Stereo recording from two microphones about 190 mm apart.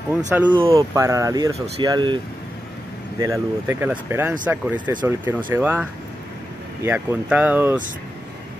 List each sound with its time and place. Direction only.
0.5 s speech: 25° right (ahead or behind)
3.2 s speech: 15° right (ahead or behind)